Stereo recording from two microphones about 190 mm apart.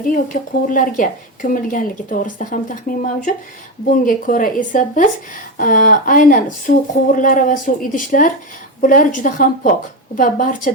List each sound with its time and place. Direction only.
0.3 s a woman's voice: 45° left (ahead or behind)